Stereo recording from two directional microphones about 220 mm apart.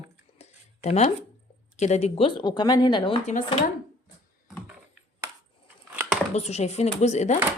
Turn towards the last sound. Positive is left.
turn(degrees=30)  # may be behind; listen again after turning